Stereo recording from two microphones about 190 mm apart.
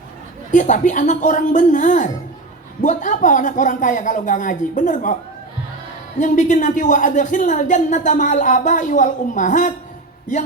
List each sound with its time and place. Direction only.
0.5 s speech: 40° left (ahead or behind)
6.1 s speech: 40° left (ahead or behind)